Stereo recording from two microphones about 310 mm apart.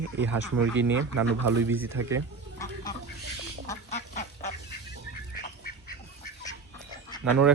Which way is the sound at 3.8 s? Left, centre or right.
Left.